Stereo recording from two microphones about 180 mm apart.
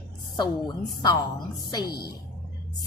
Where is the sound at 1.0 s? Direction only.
25° left (ahead or behind).